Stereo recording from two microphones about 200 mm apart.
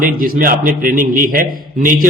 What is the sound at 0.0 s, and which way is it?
A man's voice, 45° right (ahead or behind).